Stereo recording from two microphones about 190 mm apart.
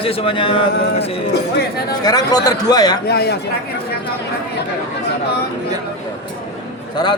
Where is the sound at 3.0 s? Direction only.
55° left (ahead or behind).